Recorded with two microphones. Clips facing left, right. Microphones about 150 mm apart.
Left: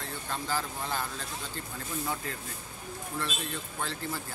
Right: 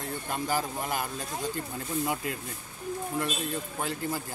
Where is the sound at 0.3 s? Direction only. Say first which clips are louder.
Right 3 dB; 15° right (ahead or behind).